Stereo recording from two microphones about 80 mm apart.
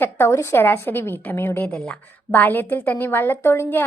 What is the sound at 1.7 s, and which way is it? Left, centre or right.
A woman's voice, centre.